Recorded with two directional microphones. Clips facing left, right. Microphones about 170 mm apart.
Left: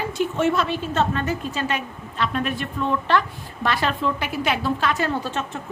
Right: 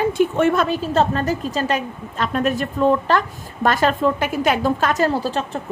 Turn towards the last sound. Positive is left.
turn(degrees=-35)  # may be behind; listen again after turning